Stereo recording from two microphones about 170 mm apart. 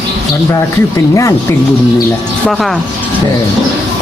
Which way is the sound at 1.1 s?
20° left (ahead or behind).